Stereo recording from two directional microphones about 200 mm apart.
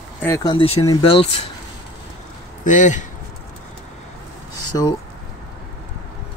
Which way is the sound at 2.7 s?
40° left (ahead or behind).